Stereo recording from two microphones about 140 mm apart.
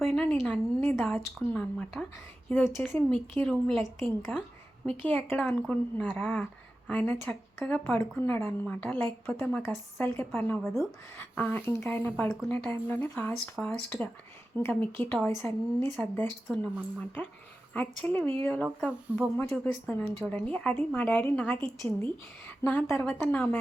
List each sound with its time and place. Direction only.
0.1 s a woman's voice: 10° left (ahead or behind)
17.7 s speech: 10° left (ahead or behind)
19.1 s speech: 10° right (ahead or behind)
19.5 s speech: 10° left (ahead or behind)